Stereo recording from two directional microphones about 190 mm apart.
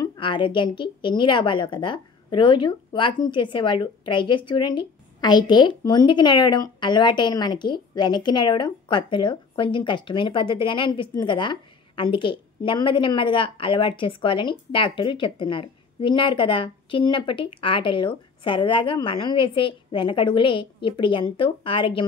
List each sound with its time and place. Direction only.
0.0 s a woman's voice: 25° left (ahead or behind)